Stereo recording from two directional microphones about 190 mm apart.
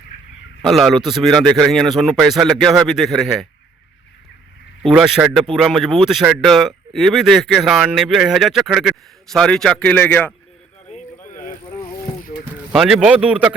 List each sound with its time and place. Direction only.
0.6 s speech: centre (ahead or behind)
4.8 s speech: centre (ahead or behind)
11.3 s a sound: 45° left (ahead or behind)
12.7 s speech: 5° right (ahead or behind)